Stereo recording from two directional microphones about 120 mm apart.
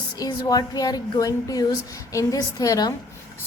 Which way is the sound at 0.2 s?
35° left (ahead or behind).